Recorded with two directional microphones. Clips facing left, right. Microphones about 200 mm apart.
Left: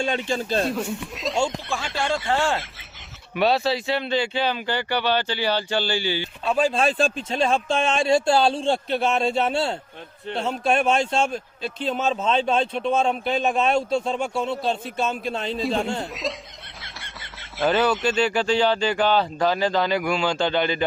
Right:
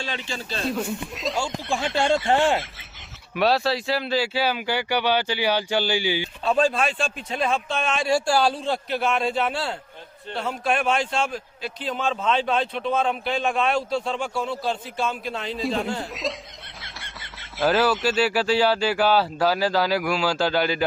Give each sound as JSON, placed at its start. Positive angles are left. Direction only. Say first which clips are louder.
{"t": 0.0, "sound": "speech", "louder": "left 7 dB", "side_deg": 50}
{"t": 0.7, "sound": "speech", "louder": "even", "side_deg": 0}
{"t": 3.3, "sound": "speech", "louder": "even", "side_deg": 0}
{"t": 6.7, "sound": "speech", "louder": "left 4 dB", "side_deg": 30}
{"t": 15.5, "sound": "speech", "louder": "even", "side_deg": 0}